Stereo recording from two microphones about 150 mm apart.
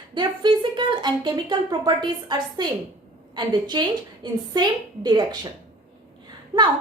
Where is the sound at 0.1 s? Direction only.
30° right (ahead or behind).